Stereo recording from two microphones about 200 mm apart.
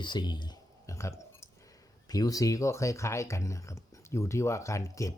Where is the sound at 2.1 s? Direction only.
20° left (ahead or behind).